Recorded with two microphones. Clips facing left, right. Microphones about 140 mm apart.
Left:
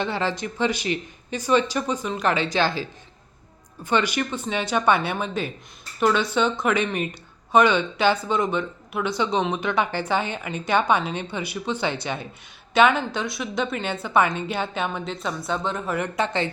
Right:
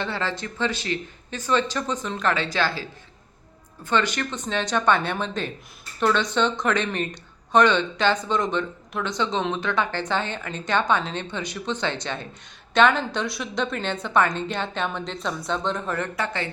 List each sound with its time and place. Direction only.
0.0 s speech: 15° left (ahead or behind)
3.8 s a woman's voice: 10° left (ahead or behind)
16.1 s speech: 20° left (ahead or behind)